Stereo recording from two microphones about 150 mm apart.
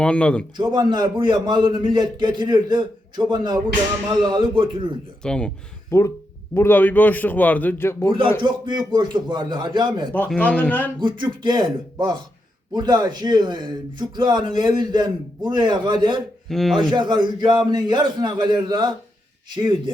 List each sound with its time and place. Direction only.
0.0 s a man's voice: 5° left (ahead or behind)
0.5 s a man's voice: 30° right (ahead or behind)
5.2 s a man's voice: 5° left (ahead or behind)
5.9 s a man's voice: 15° left (ahead or behind)
8.4 s a man's voice: 30° right (ahead or behind)
10.1 s a man's voice: 5° left (ahead or behind)
11.0 s a man's voice: 30° right (ahead or behind)
16.5 s a man's voice: centre (ahead or behind)
16.9 s a man's voice: 30° right (ahead or behind)